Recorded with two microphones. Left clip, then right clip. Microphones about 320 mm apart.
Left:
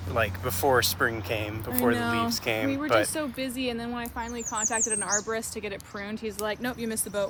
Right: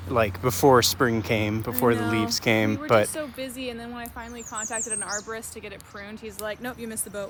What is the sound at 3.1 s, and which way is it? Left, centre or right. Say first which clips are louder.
Speech: left 1 dB; left.